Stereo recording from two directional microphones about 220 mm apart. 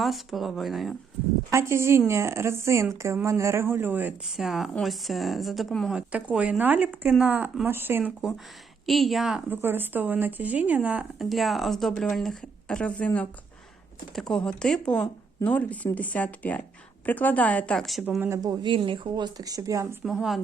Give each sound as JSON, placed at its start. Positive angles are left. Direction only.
{"t": 0.0, "sound": "a woman's voice", "side_deg": 0}
{"t": 1.5, "sound": "a woman's voice", "side_deg": -15}
{"t": 18.3, "sound": "speech", "side_deg": -20}
{"t": 20.1, "sound": "a woman's voice", "side_deg": 0}